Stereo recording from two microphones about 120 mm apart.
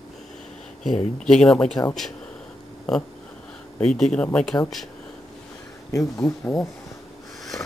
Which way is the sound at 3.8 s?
5° left (ahead or behind).